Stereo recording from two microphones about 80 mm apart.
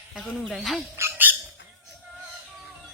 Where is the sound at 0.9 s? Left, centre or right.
Right.